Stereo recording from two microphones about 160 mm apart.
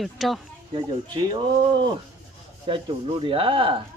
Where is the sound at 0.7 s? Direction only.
30° right (ahead or behind).